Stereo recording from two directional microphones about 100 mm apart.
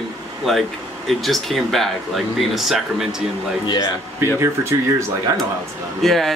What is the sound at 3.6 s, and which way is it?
Speech, 40° left (ahead or behind).